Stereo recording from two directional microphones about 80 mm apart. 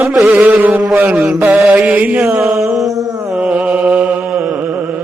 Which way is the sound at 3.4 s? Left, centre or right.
Centre.